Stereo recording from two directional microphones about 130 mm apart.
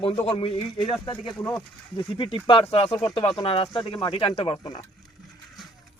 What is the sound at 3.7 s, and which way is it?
Speech, 35° left (ahead or behind).